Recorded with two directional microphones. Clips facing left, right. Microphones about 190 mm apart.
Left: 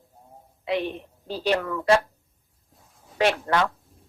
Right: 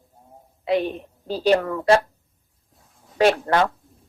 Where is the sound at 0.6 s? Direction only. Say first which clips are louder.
Right 5 dB; 40° right (ahead or behind).